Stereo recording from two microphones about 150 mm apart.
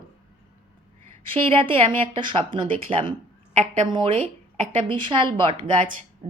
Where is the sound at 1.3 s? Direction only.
35° right (ahead or behind).